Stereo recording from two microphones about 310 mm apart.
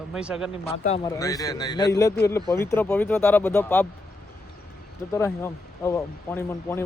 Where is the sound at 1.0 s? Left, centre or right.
Centre.